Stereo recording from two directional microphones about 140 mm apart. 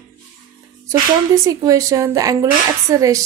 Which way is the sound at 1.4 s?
25° right (ahead or behind).